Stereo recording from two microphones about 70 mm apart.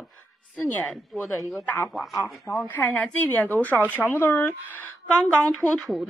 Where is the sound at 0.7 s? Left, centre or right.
Left.